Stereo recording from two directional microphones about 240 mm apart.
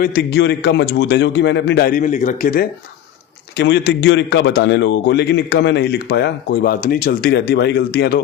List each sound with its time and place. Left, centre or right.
0.0 s a man's voice: left